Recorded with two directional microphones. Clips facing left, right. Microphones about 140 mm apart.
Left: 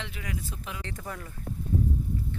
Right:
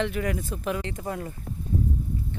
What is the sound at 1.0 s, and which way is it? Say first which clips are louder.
Speech: right 7 dB; 30° right (ahead or behind).